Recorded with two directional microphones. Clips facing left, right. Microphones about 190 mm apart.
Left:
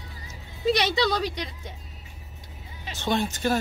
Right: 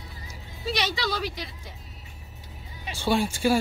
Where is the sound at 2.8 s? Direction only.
10° right (ahead or behind).